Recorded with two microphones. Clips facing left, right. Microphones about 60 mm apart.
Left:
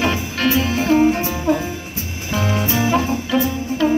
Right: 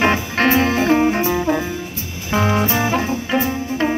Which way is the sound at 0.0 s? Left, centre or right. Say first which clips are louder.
Right 3 dB; right.